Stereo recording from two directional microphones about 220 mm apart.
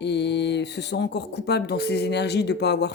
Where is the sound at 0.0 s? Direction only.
50° left (ahead or behind).